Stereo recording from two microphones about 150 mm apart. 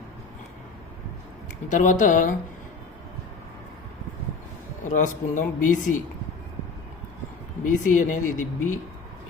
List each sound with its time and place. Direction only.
1.7 s speech: 60° left (ahead or behind)
4.8 s speech: 55° left (ahead or behind)
7.6 s speech: 60° left (ahead or behind)